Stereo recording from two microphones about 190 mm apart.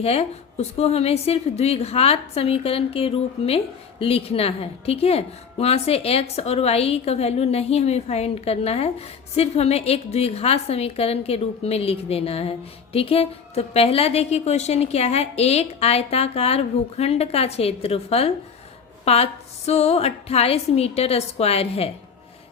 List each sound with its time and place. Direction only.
0.0 s a woman's voice: 30° left (ahead or behind)